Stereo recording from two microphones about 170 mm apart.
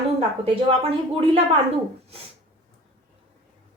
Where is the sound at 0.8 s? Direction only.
35° right (ahead or behind).